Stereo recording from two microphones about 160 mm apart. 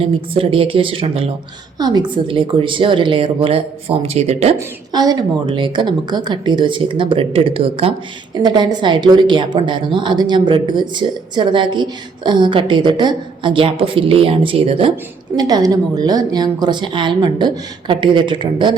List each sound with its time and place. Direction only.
0.0 s a woman's voice: 35° right (ahead or behind)
4.5 s a woman's voice: 25° right (ahead or behind)
15.4 s a woman's voice: 25° right (ahead or behind)